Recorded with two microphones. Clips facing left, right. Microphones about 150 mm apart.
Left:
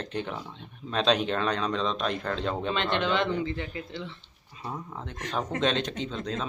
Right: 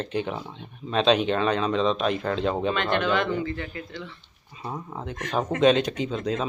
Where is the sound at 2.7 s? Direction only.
25° left (ahead or behind).